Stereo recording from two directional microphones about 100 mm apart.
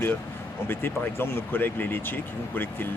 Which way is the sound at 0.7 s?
20° left (ahead or behind).